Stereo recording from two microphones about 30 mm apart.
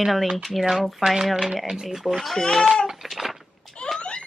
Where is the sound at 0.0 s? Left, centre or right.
Centre.